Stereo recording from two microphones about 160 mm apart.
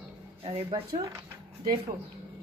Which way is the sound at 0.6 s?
40° right (ahead or behind).